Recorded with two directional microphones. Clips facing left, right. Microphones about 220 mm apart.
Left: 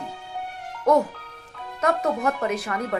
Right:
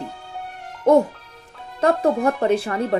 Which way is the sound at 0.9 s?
30° right (ahead or behind).